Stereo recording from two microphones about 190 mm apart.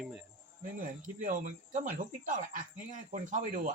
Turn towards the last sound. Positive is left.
turn(degrees=-45)  # may be behind; listen again after turning